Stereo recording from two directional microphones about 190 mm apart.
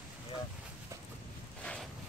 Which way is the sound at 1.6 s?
5° left (ahead or behind).